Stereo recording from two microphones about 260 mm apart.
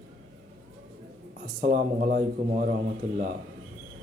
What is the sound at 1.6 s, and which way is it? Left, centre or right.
A man's voice, right.